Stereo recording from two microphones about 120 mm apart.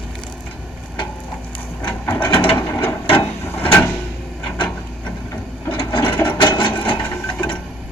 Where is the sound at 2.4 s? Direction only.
45° left (ahead or behind).